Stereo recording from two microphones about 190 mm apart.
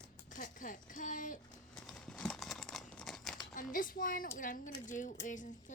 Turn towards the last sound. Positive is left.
turn(degrees=40)  # may be behind; listen again after turning